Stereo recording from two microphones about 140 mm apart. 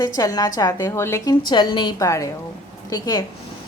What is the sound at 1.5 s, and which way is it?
A woman's voice, 30° left (ahead or behind).